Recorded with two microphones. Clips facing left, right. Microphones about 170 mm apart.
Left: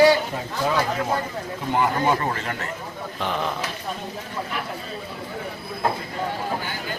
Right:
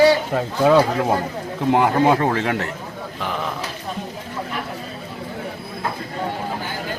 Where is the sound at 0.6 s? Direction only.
60° right (ahead or behind).